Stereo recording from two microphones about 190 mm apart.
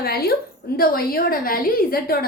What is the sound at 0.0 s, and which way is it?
A woman's voice, 55° left (ahead or behind).